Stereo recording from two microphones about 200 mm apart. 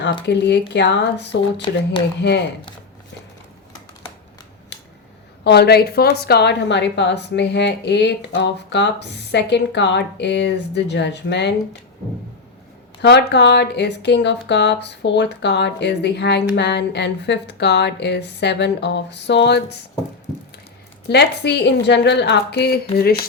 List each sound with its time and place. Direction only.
0.3 s speech: 60° left (ahead or behind)
5.4 s speech: 55° left (ahead or behind)
13.0 s speech: 55° left (ahead or behind)
21.1 s speech: 55° left (ahead or behind)